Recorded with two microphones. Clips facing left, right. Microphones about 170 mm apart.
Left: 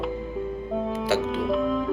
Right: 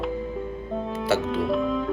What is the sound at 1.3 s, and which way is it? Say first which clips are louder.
Music: even; centre (ahead or behind).